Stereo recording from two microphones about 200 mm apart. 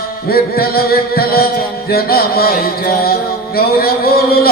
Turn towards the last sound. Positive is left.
turn(degrees=50)  # may be behind; listen again after turning